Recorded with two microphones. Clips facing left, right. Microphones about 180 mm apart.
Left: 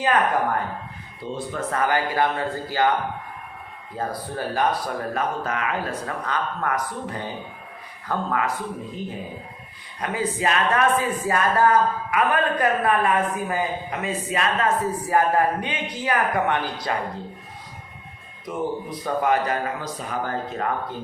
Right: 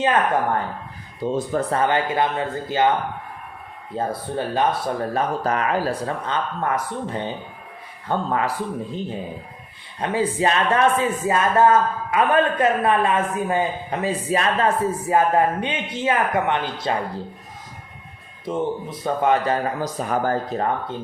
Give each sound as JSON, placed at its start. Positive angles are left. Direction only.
{"t": 1.2, "sound": "speech", "side_deg": -45}
{"t": 1.7, "sound": "a man's voice", "side_deg": -25}
{"t": 3.9, "sound": "a man's voice", "side_deg": -25}
{"t": 10.0, "sound": "a man's voice", "side_deg": -30}
{"t": 18.4, "sound": "a man's voice", "side_deg": -25}
{"t": 19.8, "sound": "speech", "side_deg": -45}